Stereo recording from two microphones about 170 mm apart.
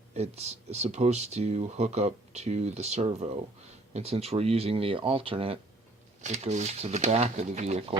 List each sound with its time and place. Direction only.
0.1 s speech: 40° right (ahead or behind)
6.2 s speech: 40° right (ahead or behind)